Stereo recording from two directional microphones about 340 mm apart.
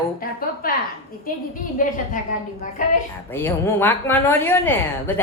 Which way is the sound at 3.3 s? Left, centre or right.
Centre.